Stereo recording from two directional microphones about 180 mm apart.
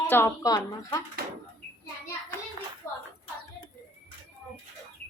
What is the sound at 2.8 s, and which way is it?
Hands, 15° left (ahead or behind).